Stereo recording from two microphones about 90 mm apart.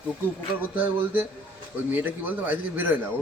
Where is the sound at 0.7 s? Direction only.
20° right (ahead or behind).